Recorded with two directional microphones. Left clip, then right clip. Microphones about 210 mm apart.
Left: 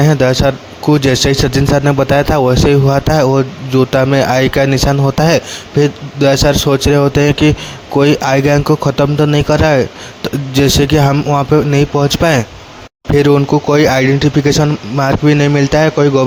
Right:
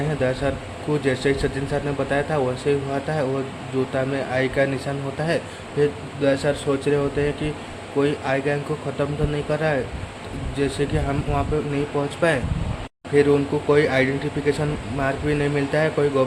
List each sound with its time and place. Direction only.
0.2 s speech: 50° left (ahead or behind)